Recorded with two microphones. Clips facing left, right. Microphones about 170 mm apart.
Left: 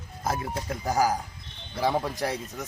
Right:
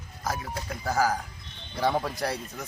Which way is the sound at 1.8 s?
5° left (ahead or behind).